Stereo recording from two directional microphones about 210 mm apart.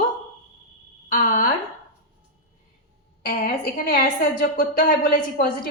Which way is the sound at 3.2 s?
45° left (ahead or behind).